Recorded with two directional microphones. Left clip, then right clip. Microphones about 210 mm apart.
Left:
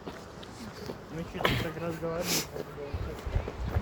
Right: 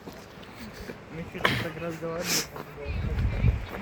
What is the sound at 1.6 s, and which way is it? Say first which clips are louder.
Speech: right 1 dB; 35° right (ahead or behind).